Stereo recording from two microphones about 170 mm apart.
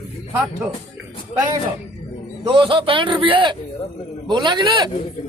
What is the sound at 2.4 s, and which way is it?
Speech, 30° right (ahead or behind).